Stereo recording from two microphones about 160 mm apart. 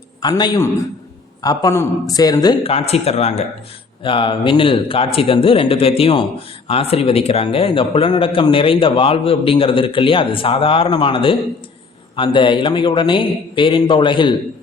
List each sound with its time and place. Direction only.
0.2 s speech: 25° left (ahead or behind)
2.6 s speech: 40° left (ahead or behind)
4.0 s speech: 30° left (ahead or behind)